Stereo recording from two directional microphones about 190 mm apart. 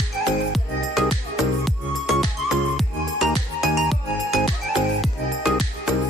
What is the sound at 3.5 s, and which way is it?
Music, centre (ahead or behind).